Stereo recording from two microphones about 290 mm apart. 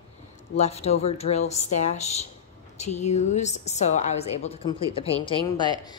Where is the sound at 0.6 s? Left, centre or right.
Left.